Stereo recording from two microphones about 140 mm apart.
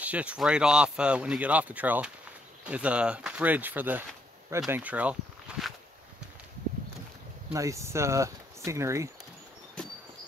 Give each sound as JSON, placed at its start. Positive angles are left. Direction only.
{"t": 0.0, "sound": "speech", "side_deg": -10}
{"t": 5.5, "sound": "walk", "side_deg": -5}
{"t": 7.5, "sound": "speech", "side_deg": -20}